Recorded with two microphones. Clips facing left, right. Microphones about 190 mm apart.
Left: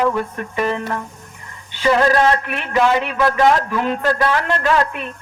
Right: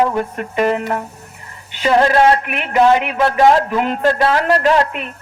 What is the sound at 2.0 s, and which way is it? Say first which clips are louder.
Speech: right 5 dB; 30° right (ahead or behind).